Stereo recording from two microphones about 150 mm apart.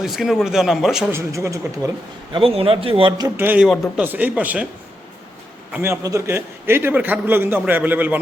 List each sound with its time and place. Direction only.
0.0 s speech: centre (ahead or behind)
1.1 s speech: 20° right (ahead or behind)
2.3 s speech: 40° right (ahead or behind)
3.3 s a man's voice: 10° right (ahead or behind)
5.7 s a man's voice: 15° right (ahead or behind)